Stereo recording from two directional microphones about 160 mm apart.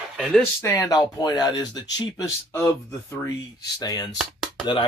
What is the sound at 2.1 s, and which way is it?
Speech, 15° left (ahead or behind).